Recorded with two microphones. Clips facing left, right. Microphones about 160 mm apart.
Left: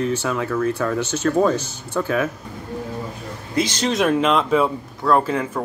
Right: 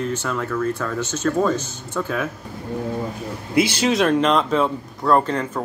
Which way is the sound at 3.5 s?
10° right (ahead or behind).